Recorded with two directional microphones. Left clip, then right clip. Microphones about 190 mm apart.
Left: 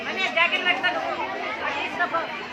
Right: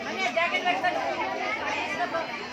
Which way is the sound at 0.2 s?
25° left (ahead or behind).